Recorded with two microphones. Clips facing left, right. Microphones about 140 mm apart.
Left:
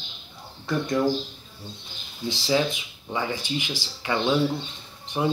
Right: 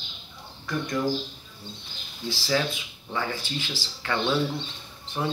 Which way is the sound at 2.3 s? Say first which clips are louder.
Left 3 dB; 20° left (ahead or behind).